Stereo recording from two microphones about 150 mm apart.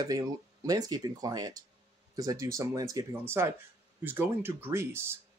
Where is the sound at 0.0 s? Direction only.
25° right (ahead or behind).